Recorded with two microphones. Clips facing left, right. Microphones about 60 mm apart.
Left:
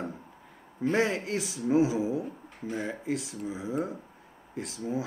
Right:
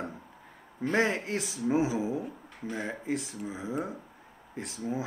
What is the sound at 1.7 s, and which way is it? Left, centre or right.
Speech, right.